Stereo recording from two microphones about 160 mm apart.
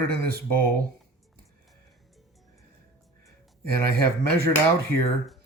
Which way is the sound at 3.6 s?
75° right (ahead or behind).